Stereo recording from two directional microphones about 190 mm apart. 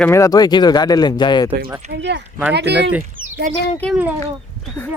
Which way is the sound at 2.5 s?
65° right (ahead or behind).